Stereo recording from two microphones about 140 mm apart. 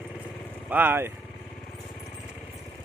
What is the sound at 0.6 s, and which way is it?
Speech, 15° right (ahead or behind).